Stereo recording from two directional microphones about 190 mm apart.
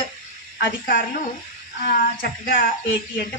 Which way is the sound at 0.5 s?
50° left (ahead or behind).